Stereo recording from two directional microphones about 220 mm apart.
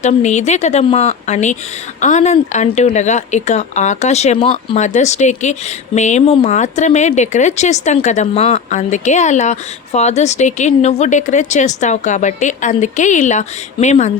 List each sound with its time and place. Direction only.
0.0 s speech: 30° left (ahead or behind)